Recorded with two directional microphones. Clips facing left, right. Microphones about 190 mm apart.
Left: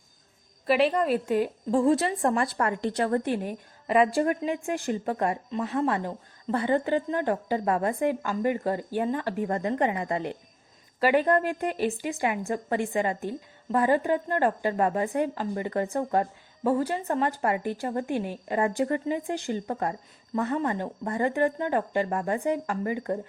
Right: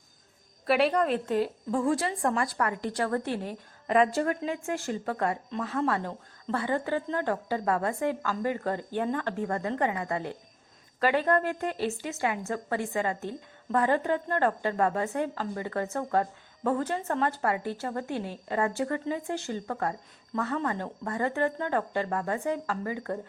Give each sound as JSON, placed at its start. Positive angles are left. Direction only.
{"t": 0.6, "sound": "a woman's voice", "side_deg": 0}
{"t": 1.7, "sound": "a woman's voice", "side_deg": 25}